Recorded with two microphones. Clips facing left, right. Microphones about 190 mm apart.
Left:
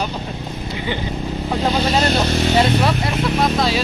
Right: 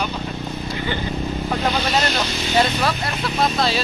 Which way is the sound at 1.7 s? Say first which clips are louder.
Left 5 dB; 30° left (ahead or behind).